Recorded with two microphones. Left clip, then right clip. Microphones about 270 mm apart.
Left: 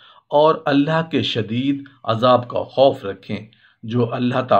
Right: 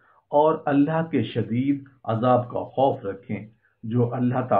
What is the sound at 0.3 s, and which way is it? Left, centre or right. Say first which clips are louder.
Speech: left 5 dB; left.